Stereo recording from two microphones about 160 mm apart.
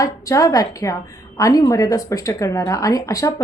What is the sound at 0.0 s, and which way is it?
A woman's voice, 20° left (ahead or behind).